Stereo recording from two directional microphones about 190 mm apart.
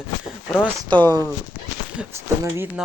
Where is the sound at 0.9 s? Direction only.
25° right (ahead or behind).